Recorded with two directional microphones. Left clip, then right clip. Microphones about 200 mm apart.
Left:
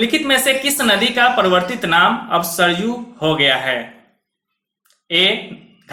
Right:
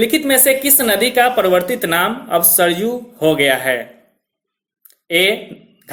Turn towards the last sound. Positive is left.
turn(degrees=-50)  # may be behind; listen again after turning